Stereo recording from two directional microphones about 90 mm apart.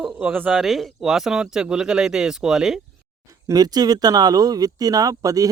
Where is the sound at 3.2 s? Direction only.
40° right (ahead or behind).